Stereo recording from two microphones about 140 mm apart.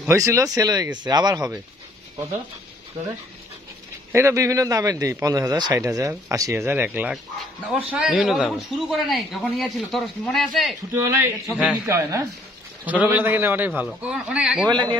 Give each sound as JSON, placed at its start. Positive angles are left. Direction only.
{"t": 0.1, "sound": "a man's voice", "side_deg": -20}
{"t": 4.1, "sound": "a man's voice", "side_deg": -20}
{"t": 11.0, "sound": "a man's voice", "side_deg": -20}
{"t": 11.5, "sound": "speech", "side_deg": -5}
{"t": 11.8, "sound": "a man's voice", "side_deg": -20}
{"t": 12.8, "sound": "a man's voice", "side_deg": -10}
{"t": 14.7, "sound": "a man's voice", "side_deg": -30}